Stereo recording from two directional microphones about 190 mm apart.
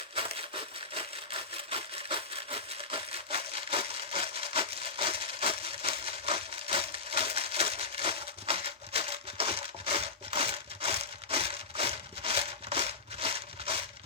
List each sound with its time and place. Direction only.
1.7 s wood: 30° right (ahead or behind)